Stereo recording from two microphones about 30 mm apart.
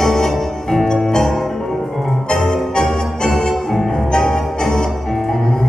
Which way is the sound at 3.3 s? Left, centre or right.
Left.